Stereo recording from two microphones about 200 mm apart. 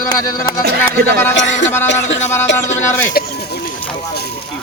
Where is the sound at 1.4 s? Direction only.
65° left (ahead or behind).